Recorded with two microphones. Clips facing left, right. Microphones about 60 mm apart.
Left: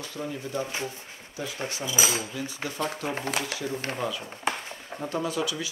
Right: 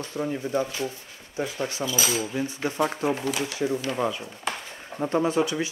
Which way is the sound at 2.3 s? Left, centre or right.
Right.